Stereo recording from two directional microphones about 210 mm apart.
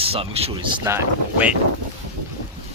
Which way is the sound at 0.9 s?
10° right (ahead or behind).